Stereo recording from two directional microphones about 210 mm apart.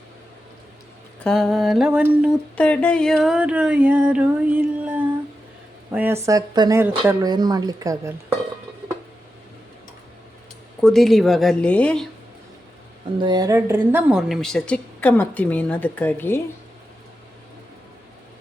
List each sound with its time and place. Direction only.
1.2 s a woman's voice: centre (ahead or behind)
2.6 s a woman's voice: 5° left (ahead or behind); by 8.1 s 15° right (ahead or behind)
10.8 s a woman's voice: centre (ahead or behind)
13.1 s a woman's voice: 20° right (ahead or behind); by 16.4 s 10° left (ahead or behind)